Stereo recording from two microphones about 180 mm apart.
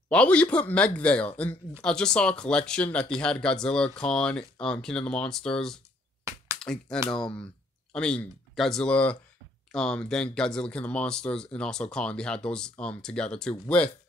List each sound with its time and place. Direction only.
0.1 s a man's voice: 5° left (ahead or behind)
6.2 s a sound: 15° right (ahead or behind)
6.6 s speech: 5° left (ahead or behind)